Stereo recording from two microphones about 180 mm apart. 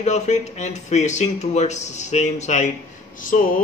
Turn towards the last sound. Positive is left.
turn(degrees=50)  # may be behind; listen again after turning